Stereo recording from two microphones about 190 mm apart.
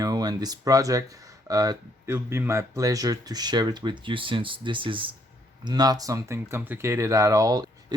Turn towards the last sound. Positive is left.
turn(degrees=-20)  # may be behind; listen again after turning